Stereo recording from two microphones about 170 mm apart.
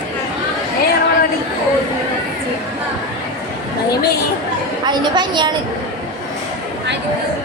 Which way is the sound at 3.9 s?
70° left (ahead or behind).